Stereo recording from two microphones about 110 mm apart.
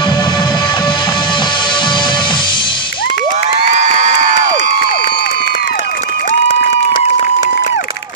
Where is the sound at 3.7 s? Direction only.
90° right.